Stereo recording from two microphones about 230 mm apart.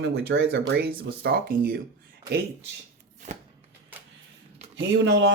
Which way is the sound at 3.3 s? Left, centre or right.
Right.